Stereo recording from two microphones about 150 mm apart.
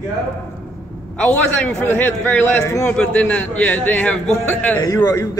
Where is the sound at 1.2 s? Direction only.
10° left (ahead or behind).